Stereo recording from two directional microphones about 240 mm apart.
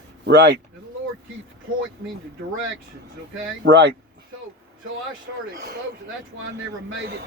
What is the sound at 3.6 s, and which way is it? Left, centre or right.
Speech, right.